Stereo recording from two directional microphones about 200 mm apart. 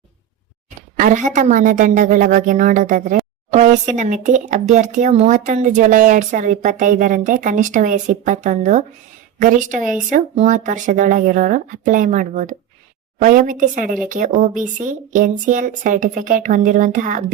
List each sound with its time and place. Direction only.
0.9 s speech: 40° right (ahead or behind)